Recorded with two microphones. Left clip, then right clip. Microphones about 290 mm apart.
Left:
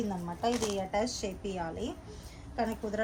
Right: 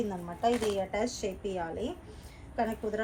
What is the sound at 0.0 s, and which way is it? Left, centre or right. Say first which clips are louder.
Speech: right 2 dB; centre.